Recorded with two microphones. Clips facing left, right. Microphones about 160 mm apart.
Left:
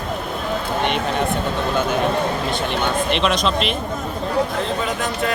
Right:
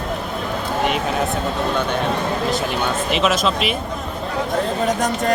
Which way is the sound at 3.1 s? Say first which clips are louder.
Right 3 dB; 5° right (ahead or behind).